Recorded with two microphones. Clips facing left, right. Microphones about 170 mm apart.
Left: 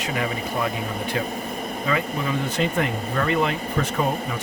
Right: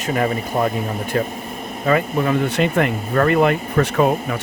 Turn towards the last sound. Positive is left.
turn(degrees=-70)  # may be behind; listen again after turning